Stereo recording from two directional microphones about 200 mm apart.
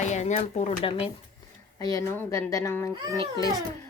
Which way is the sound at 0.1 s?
35° left (ahead or behind).